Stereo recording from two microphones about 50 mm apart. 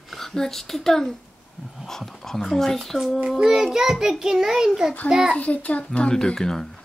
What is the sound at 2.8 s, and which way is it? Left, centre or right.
Child singing, centre.